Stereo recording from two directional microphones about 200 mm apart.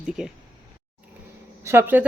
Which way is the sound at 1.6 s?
15° right (ahead or behind).